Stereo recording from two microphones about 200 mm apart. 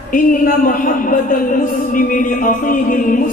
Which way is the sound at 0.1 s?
45° left (ahead or behind).